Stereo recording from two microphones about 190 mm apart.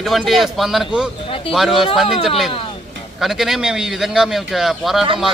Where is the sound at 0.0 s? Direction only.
Centre (ahead or behind).